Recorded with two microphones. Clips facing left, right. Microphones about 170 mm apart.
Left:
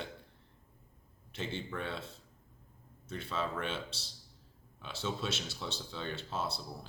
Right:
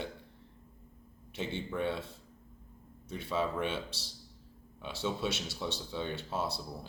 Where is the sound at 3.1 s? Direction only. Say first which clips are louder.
Right 4 dB; 10° right (ahead or behind).